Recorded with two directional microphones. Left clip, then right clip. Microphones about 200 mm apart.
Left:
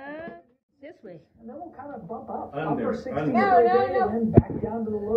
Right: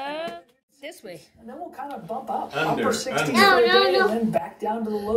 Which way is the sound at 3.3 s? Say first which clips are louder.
Right 2 dB; 50° right (ahead or behind).